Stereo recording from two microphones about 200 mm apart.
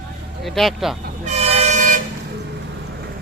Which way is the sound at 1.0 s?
35° right (ahead or behind).